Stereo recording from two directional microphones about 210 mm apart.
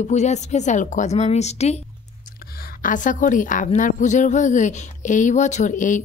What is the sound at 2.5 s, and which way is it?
A woman's voice, 40° left (ahead or behind).